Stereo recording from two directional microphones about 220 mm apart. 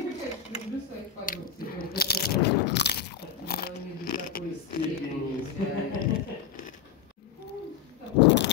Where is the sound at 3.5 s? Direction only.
45° left (ahead or behind).